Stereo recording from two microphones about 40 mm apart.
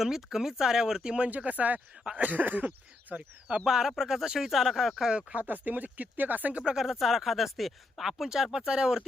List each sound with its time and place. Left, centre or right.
0.0 s speech: centre
1.3 s speech: right
3.7 s speech: centre
5.4 s speech: right
6.7 s speech: centre
8.5 s speech: centre